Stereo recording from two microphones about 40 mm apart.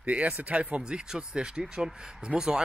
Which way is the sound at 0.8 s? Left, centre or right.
Right.